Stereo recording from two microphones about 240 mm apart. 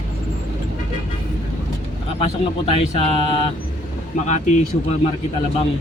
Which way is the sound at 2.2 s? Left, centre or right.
Left.